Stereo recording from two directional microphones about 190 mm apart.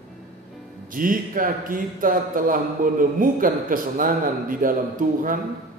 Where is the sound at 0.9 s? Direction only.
45° right (ahead or behind).